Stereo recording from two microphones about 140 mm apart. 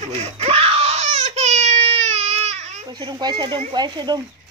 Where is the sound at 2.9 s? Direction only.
30° right (ahead or behind).